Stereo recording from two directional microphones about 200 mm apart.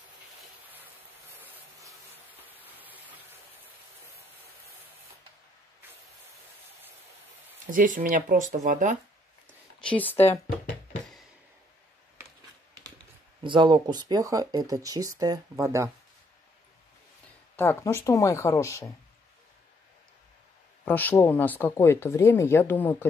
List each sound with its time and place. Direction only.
1.4 s a sound: 10° right (ahead or behind)
7.7 s speech: 40° right (ahead or behind)
9.8 s speech: 5° left (ahead or behind)
10.2 s speech: 30° left (ahead or behind)
13.4 s speech: 25° right (ahead or behind)
17.6 s speech: 10° left (ahead or behind)
20.8 s speech: 10° left (ahead or behind)